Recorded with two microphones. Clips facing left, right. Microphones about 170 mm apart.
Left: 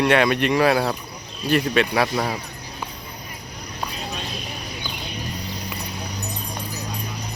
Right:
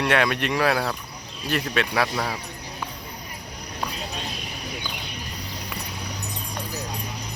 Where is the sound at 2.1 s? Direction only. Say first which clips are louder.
Left 4 dB; 20° left (ahead or behind).